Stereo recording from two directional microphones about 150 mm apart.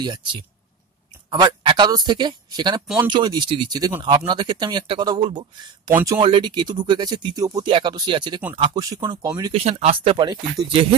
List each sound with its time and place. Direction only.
0.0 s speech: 30° right (ahead or behind)
5.9 s speech: 15° right (ahead or behind)
6.1 s speech: 30° right (ahead or behind)
9.5 s speech: 45° right (ahead or behind)